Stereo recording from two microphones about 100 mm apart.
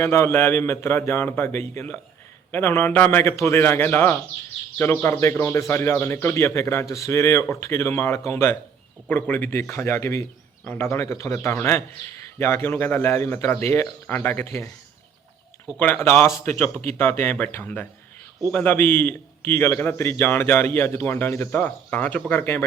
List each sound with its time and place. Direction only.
0.0 s a man's voice: 25° left (ahead or behind)
15.8 s a man's voice: 20° left (ahead or behind)